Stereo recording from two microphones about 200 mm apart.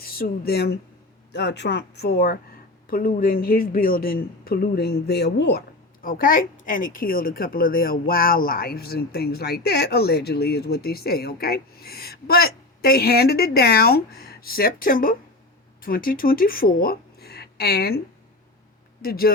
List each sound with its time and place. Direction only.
0.0 s speech: 50° left (ahead or behind)
19.0 s speech: 50° left (ahead or behind)